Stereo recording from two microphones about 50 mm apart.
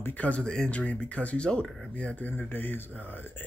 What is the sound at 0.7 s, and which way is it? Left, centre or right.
Speech, left.